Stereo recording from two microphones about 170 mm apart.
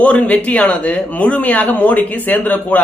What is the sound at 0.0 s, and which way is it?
Speech, 5° left (ahead or behind).